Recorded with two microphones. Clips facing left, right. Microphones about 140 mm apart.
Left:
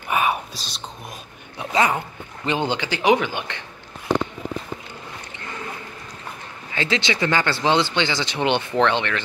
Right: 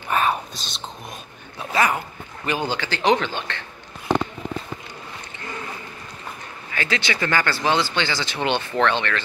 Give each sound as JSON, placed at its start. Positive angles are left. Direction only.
{"t": 0.1, "sound": "whispering", "side_deg": 10}
{"t": 0.6, "sound": "speech", "side_deg": 0}
{"t": 1.6, "sound": "speech", "side_deg": 20}
{"t": 6.7, "sound": "speech", "side_deg": 25}